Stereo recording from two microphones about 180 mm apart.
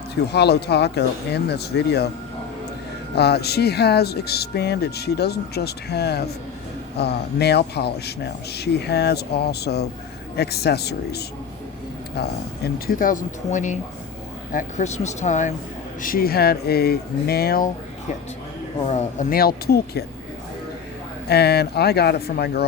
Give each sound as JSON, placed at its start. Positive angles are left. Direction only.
{"t": 0.3, "sound": "speech", "side_deg": 65}
{"t": 3.2, "sound": "speech", "side_deg": 65}
{"t": 16.0, "sound": "speech", "side_deg": 50}
{"t": 19.3, "sound": "speech", "side_deg": 55}
{"t": 21.2, "sound": "speech", "side_deg": 60}